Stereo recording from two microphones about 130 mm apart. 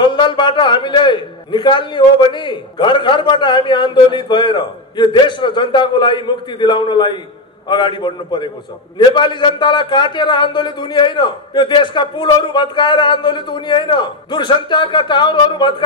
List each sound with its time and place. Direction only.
0.0 s a man's voice: 40° left (ahead or behind)